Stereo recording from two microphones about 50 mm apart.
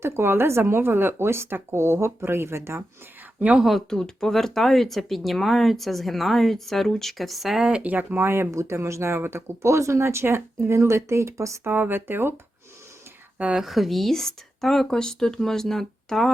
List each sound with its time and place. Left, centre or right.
0.0 s speech: right
3.6 s speech: centre
3.8 s speech: centre
7.7 s speech: right
8.2 s speech: right
8.4 s speech: right
11.6 s speech: right
13.6 s speech: centre